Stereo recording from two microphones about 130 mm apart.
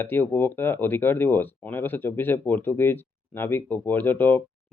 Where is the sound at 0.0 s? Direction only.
15° left (ahead or behind).